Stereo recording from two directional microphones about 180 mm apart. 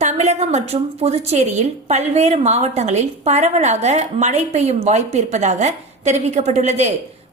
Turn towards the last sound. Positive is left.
turn(degrees=-40)  # may be behind; listen again after turning